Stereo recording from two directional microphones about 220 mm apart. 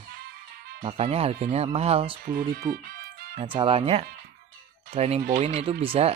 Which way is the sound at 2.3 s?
40° right (ahead or behind).